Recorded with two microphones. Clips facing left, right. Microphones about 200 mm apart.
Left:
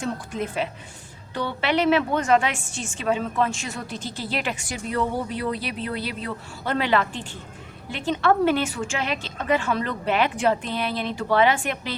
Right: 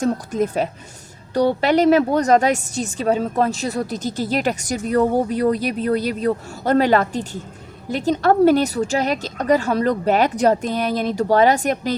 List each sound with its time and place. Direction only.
0.0 s a woman's voice: 40° right (ahead or behind)